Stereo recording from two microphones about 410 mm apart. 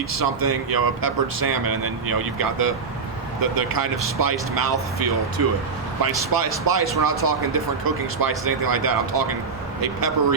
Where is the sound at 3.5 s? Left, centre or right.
Right.